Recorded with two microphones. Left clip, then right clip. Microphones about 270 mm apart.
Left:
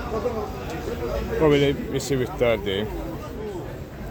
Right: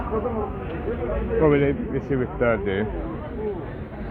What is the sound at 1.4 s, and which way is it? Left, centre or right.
Speech, left.